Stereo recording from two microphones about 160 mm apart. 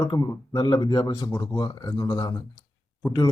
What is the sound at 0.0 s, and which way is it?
Speech, 25° left (ahead or behind).